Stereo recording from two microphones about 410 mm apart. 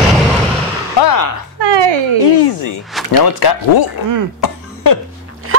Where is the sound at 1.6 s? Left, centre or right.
Right.